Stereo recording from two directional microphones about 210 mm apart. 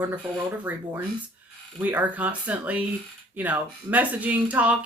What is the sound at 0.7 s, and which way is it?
Speech, 5° right (ahead or behind).